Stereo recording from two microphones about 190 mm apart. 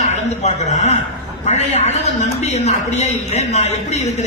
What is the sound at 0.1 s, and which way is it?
A man's voice, 35° left (ahead or behind).